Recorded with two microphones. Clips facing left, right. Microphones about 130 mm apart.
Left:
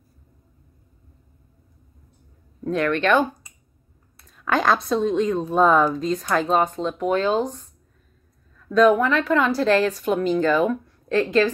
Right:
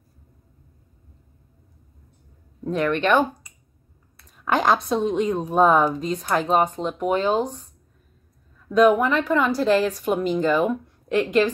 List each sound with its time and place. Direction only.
2.6 s a woman's voice: 10° right (ahead or behind)
4.8 s a woman's voice: 10° right (ahead or behind)
8.6 s a woman's voice: 15° right (ahead or behind)